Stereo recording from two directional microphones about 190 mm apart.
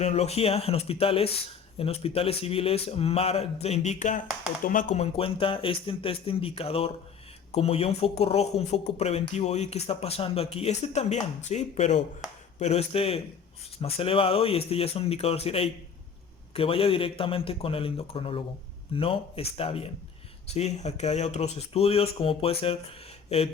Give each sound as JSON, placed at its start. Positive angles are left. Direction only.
{"t": 0.0, "sound": "speech", "side_deg": 35}
{"t": 5.1, "sound": "a man's voice", "side_deg": 30}